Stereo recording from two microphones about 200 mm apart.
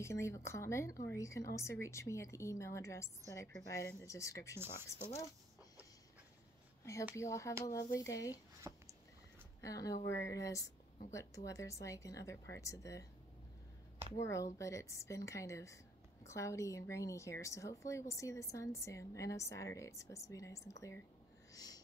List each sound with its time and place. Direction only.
0.0 s a woman's voice: 15° left (ahead or behind)
6.8 s a woman's voice: 15° left (ahead or behind)
8.6 s a sound: 20° right (ahead or behind)
9.6 s a woman's voice: 15° left (ahead or behind)
14.1 s a woman's voice: 15° left (ahead or behind)
21.5 s a sound: 20° left (ahead or behind)